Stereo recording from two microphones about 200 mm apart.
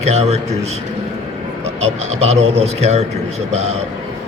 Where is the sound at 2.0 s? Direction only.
35° right (ahead or behind).